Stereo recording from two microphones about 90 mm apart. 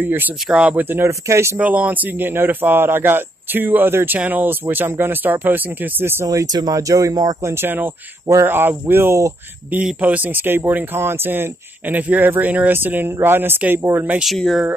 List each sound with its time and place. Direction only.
0.0 s speech: 20° right (ahead or behind)
1.6 s speech: 15° right (ahead or behind)
6.2 s speech: 45° right (ahead or behind)
7.4 s speech: 25° right (ahead or behind)
9.9 s speech: 15° right (ahead or behind)
14.2 s speech: centre (ahead or behind)